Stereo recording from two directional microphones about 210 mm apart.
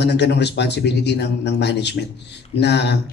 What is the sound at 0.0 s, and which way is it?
A man's voice, 55° left (ahead or behind).